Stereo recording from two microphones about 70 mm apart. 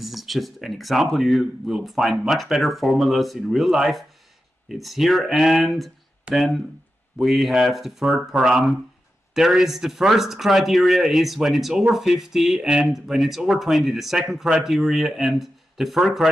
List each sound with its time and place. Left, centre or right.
0.0 s speech: centre